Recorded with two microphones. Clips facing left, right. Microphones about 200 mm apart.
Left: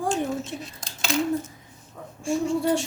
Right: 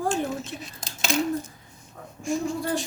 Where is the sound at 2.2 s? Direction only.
30° left (ahead or behind).